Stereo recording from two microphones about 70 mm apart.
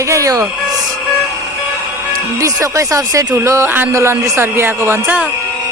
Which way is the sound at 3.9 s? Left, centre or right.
Right.